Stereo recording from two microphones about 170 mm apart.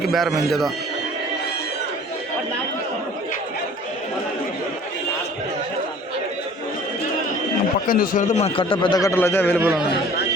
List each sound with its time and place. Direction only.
0.0 s speech: centre (ahead or behind)
7.9 s a man's voice: 55° left (ahead or behind); by 9.6 s 10° left (ahead or behind)